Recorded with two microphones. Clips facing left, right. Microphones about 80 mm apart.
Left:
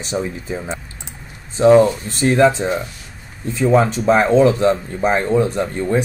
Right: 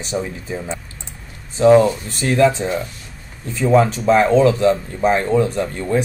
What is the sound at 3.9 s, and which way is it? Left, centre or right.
Speech, left.